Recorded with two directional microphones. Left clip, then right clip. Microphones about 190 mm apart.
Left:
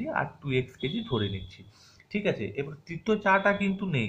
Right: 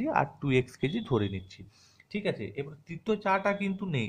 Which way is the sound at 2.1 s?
25° right (ahead or behind).